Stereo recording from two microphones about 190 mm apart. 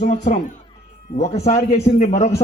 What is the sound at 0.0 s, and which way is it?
Speech, 35° left (ahead or behind).